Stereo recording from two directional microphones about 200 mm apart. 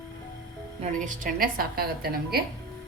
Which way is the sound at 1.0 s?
40° right (ahead or behind).